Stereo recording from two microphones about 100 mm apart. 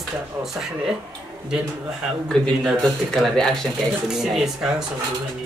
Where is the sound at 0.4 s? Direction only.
5° right (ahead or behind).